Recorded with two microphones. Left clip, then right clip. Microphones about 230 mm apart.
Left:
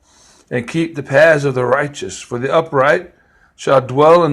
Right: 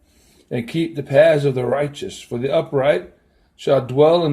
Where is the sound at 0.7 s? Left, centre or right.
Centre.